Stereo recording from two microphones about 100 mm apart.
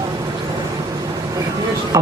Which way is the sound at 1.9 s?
35° right (ahead or behind).